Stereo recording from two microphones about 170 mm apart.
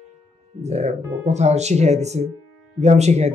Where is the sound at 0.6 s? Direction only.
40° right (ahead or behind).